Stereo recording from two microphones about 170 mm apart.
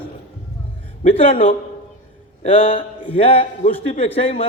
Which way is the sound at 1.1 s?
35° left (ahead or behind).